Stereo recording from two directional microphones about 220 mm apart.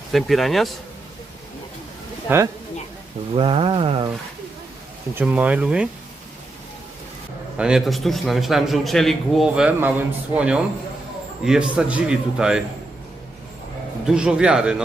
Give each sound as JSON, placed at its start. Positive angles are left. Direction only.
{"t": 0.1, "sound": "a man's voice", "side_deg": 0}
{"t": 2.2, "sound": "speech", "side_deg": -10}
{"t": 3.3, "sound": "speech", "side_deg": -25}
{"t": 5.1, "sound": "a man's voice", "side_deg": -5}
{"t": 7.5, "sound": "a man's voice", "side_deg": -5}
{"t": 14.0, "sound": "a man's voice", "side_deg": -5}